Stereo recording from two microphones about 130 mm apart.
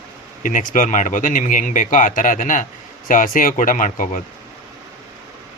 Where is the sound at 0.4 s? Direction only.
90° left.